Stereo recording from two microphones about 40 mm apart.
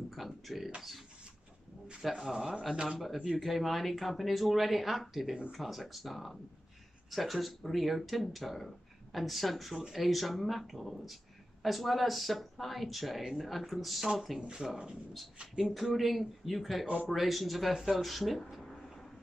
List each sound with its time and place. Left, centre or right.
0.1 s speech: centre
3.3 s speech: centre
14.5 s speech: centre
15.5 s speech: centre
16.8 s speech: right
17.1 s speech: centre